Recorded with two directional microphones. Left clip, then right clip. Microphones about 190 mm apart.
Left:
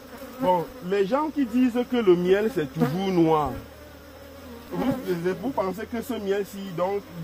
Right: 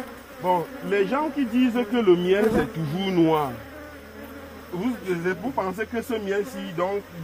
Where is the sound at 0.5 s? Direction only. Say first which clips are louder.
Right 1 dB; 10° right (ahead or behind).